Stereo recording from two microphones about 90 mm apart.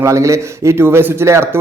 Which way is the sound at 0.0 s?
35° right (ahead or behind).